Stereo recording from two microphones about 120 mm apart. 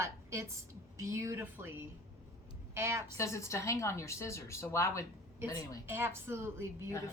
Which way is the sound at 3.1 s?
25° left (ahead or behind).